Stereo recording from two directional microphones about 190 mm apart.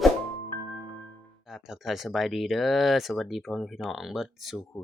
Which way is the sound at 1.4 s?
5° right (ahead or behind).